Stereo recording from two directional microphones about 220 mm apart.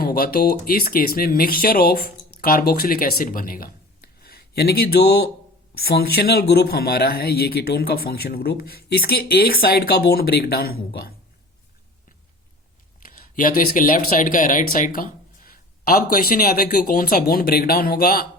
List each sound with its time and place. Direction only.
0.0 s speech: 45° left (ahead or behind)
13.0 s speech: 40° left (ahead or behind)